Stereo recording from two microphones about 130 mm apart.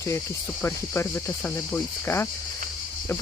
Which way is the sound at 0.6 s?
15° left (ahead or behind).